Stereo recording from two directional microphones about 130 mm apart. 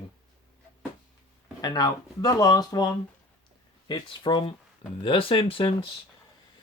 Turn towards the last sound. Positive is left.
turn(degrees=45)  # may be behind; listen again after turning